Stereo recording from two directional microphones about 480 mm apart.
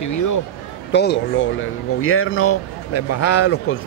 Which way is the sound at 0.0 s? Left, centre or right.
Left.